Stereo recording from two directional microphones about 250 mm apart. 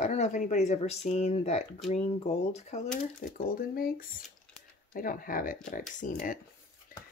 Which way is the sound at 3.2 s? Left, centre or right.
Left.